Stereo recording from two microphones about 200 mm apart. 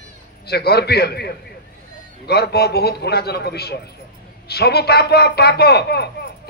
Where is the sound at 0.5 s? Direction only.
55° left (ahead or behind).